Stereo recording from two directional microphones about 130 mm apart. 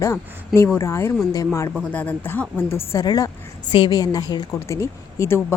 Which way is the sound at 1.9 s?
10° left (ahead or behind).